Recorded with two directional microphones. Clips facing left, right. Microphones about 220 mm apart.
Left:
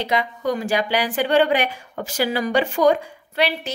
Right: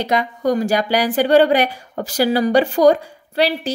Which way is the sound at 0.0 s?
45° right (ahead or behind).